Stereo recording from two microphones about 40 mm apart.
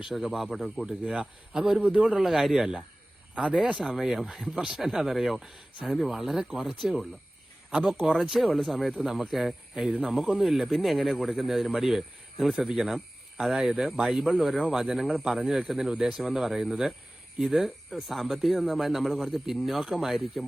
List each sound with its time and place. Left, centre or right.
0.0 s speech: centre
0.9 s speech: centre
3.7 s speech: right
3.9 s speech: centre
4.5 s speech: centre
4.8 s speech: centre
8.2 s speech: centre
16.0 s speech: centre
16.2 s speech: centre